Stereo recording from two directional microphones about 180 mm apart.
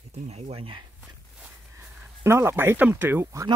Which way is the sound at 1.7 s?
15° right (ahead or behind).